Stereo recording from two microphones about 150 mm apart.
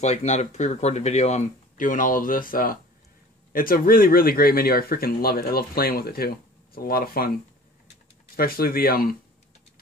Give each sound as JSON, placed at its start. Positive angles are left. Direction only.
{"t": 0.0, "sound": "speech", "side_deg": 50}
{"t": 8.4, "sound": "speech", "side_deg": 85}